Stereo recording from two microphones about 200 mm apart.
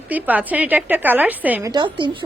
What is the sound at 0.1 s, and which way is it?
Speech, 10° right (ahead or behind).